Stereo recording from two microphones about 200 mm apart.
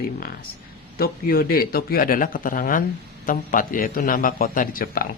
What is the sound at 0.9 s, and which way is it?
A man's voice, 50° left (ahead or behind).